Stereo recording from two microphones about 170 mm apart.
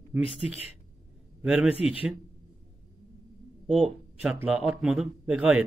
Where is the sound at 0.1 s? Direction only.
10° right (ahead or behind).